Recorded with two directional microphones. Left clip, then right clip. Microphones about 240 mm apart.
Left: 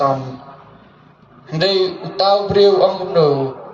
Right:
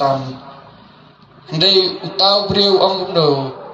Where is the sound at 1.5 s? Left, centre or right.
Left.